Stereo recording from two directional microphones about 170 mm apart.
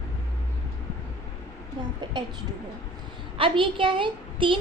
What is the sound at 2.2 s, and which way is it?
Speech, 25° right (ahead or behind).